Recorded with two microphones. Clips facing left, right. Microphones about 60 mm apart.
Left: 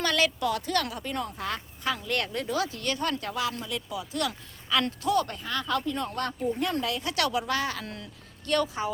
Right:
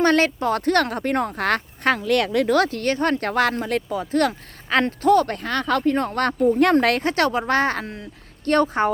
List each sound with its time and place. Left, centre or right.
0.0 s a woman's voice: right
0.6 s speech: right
2.8 s speech: right
5.4 s speech: right
7.0 s speech: right